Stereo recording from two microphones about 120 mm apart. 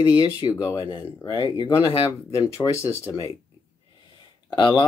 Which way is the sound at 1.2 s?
40° left (ahead or behind).